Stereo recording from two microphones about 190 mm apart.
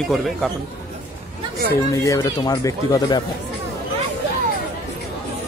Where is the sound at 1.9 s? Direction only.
15° left (ahead or behind).